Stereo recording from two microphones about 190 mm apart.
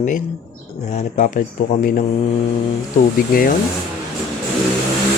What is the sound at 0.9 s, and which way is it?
Speech, 35° left (ahead or behind).